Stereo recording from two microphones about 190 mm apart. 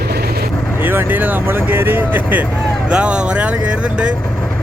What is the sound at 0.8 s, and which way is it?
Speech, 10° right (ahead or behind).